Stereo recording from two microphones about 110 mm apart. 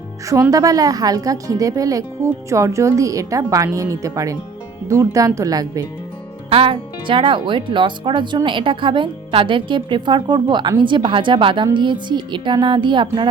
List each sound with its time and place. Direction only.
0.5 s speech: 35° right (ahead or behind)
6.5 s a woman's voice: 55° right (ahead or behind)